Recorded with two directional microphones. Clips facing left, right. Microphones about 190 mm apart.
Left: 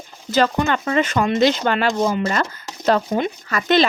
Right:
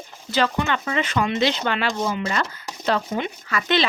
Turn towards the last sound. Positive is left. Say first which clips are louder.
# left 5 dB
turn(degrees=45)  # may be behind; listen again after turning